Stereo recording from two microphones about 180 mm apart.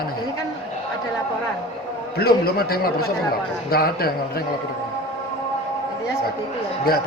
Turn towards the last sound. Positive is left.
turn(degrees=60)  # may be behind; listen again after turning